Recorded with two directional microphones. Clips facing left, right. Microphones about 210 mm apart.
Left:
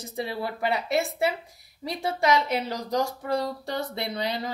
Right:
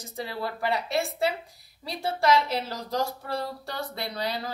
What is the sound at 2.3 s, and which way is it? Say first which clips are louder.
A woman's voice: left 1 dB; 20° left (ahead or behind).